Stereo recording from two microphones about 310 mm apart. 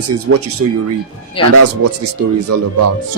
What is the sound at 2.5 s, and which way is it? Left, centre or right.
Speech, right.